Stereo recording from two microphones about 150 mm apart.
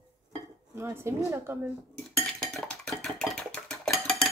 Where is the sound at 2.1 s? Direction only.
5° left (ahead or behind).